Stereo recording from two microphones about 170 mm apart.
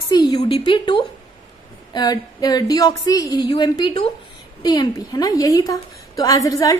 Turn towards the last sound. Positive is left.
turn(degrees=20)  # may be behind; listen again after turning